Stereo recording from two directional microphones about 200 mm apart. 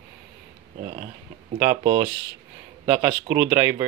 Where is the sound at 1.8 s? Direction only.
45° right (ahead or behind).